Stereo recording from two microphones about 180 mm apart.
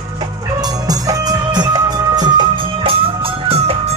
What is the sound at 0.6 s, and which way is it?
Music, 20° right (ahead or behind).